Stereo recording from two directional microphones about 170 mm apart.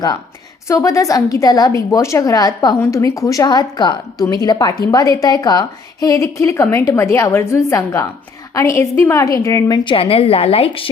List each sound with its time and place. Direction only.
0.7 s a woman's voice: 20° left (ahead or behind); by 10.8 s 35° left (ahead or behind)